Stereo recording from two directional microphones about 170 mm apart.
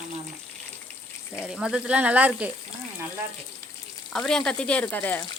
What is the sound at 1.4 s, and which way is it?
Speech, 5° right (ahead or behind).